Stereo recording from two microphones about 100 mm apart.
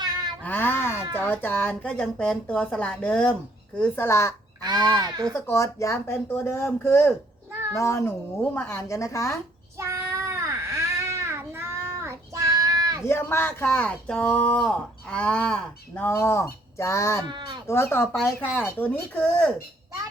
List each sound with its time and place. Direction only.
0.0 s a sound: 45° right (ahead or behind)
0.4 s a sound: 20° left (ahead or behind)
1.3 s speech: 20° left (ahead or behind)
4.6 s honk: 45° right (ahead or behind)
5.3 s speech: 30° left (ahead or behind)
7.8 s speech: 30° left (ahead or behind)
8.4 s speech: 10° left (ahead or behind)
8.9 s speech: 30° left (ahead or behind)
9.7 s baby cry: 30° right (ahead or behind)
13.1 s speech: 25° left (ahead or behind)
16.0 s speech: 25° left (ahead or behind)
17.2 s honk: 50° right (ahead or behind)
17.7 s speech: 25° left (ahead or behind)